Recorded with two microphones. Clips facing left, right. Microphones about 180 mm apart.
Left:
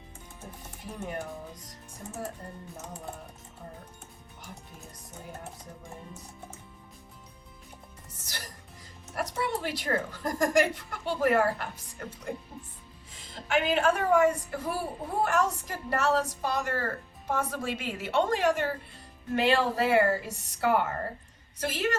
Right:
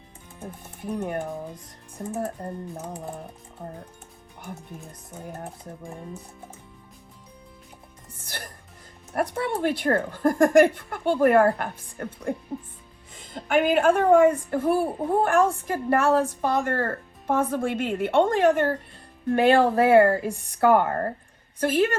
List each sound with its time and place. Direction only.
0.8 s a woman's voice: 55° right (ahead or behind)
8.1 s music: 55° right (ahead or behind)
9.1 s a woman's voice: 55° right (ahead or behind)